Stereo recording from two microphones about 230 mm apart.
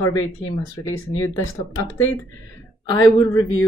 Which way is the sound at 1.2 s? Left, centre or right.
Centre.